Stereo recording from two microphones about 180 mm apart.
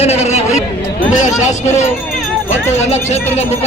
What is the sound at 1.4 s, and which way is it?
Speech, 40° left (ahead or behind).